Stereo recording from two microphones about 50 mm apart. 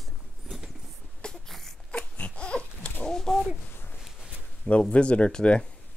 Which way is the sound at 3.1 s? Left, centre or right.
Centre.